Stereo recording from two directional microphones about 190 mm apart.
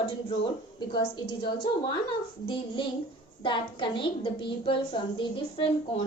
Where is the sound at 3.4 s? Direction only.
25° left (ahead or behind).